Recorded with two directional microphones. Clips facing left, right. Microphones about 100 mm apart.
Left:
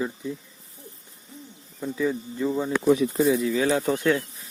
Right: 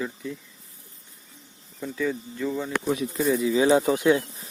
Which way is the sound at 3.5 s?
20° right (ahead or behind).